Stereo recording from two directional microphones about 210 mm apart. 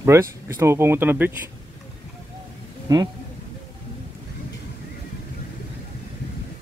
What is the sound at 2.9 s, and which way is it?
Speech, 15° right (ahead or behind).